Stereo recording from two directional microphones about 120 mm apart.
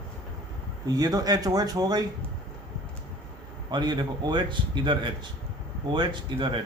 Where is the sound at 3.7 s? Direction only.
35° right (ahead or behind).